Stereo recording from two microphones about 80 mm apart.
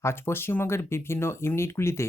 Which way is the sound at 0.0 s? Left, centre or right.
Left.